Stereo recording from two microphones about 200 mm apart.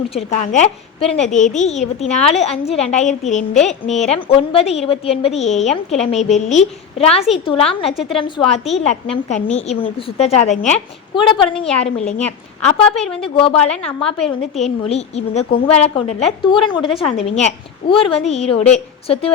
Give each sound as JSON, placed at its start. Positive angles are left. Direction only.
{"t": 0.1, "sound": "a woman's voice", "side_deg": 30}
{"t": 11.1, "sound": "a woman's voice", "side_deg": 25}
{"t": 11.5, "sound": "a woman's voice", "side_deg": 5}
{"t": 11.9, "sound": "a woman's voice", "side_deg": 30}
{"t": 13.0, "sound": "a woman's voice", "side_deg": 5}
{"t": 13.2, "sound": "a woman's voice", "side_deg": 25}
{"t": 13.7, "sound": "a woman's voice", "side_deg": 5}
{"t": 14.3, "sound": "a woman's voice", "side_deg": 30}